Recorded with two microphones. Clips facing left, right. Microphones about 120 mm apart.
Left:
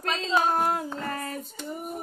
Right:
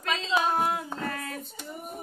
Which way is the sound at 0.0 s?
40° left (ahead or behind).